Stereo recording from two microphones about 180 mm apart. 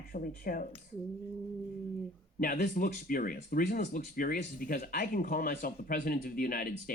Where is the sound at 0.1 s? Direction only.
50° left (ahead or behind).